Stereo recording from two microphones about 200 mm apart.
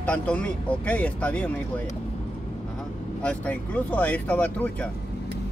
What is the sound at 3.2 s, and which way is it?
Speech, 5° left (ahead or behind).